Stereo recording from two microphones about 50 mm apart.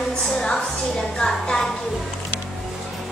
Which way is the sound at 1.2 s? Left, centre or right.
Centre.